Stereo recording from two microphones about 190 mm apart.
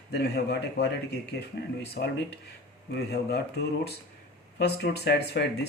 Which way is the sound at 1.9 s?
60° left (ahead or behind).